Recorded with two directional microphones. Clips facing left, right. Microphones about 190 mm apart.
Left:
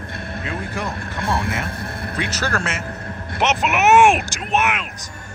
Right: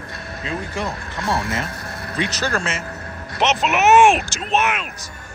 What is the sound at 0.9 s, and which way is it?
Speech, 55° left (ahead or behind).